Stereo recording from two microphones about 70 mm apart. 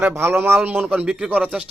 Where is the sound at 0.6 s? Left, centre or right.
Right.